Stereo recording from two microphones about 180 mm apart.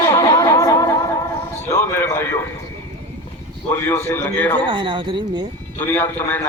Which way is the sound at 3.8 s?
15° left (ahead or behind).